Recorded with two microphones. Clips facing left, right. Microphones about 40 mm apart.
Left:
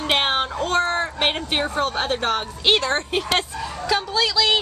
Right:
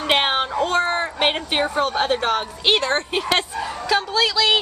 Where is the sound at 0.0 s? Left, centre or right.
Centre.